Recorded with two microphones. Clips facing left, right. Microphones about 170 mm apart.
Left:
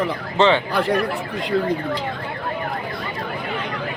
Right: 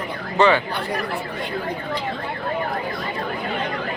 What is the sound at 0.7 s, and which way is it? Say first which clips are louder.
Speech: left 7 dB; 85° left.